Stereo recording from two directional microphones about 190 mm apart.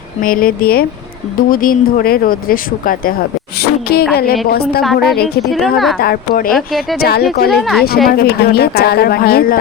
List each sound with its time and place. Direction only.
0.2 s speech: 50° left (ahead or behind)
3.6 s a sound: 55° left (ahead or behind)
4.1 s a woman's voice: 55° left (ahead or behind)
4.8 s a woman's voice: centre (ahead or behind)
6.0 s speech: 50° left (ahead or behind)
6.5 s a woman's voice: centre (ahead or behind)
6.9 s a woman's voice: 55° left (ahead or behind)
7.5 s a woman's voice: centre (ahead or behind)
8.0 s speech: 50° left (ahead or behind)